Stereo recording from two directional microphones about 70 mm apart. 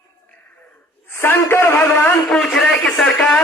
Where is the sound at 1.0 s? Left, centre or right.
Left.